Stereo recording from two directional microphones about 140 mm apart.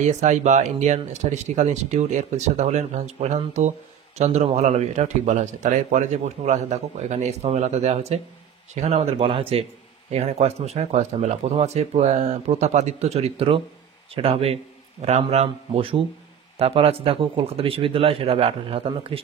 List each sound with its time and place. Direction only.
0.0 s speech: 55° right (ahead or behind)